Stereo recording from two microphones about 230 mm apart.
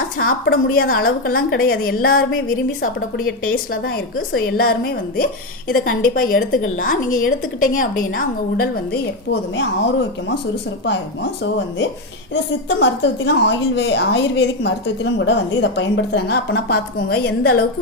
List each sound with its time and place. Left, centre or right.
0.2 s a woman's voice: left
3.7 s a woman's voice: left
10.8 s speech: left